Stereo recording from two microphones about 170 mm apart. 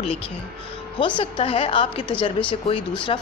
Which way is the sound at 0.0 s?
35° left (ahead or behind).